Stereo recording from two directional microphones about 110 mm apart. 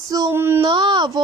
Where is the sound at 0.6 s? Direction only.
45° right (ahead or behind).